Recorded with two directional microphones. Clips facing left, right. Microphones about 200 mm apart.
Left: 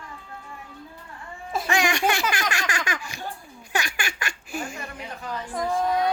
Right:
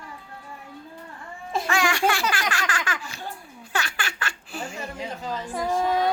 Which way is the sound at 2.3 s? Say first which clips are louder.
Even; 15° left (ahead or behind).